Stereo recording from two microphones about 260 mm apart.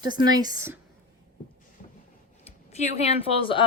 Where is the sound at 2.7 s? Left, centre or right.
Left.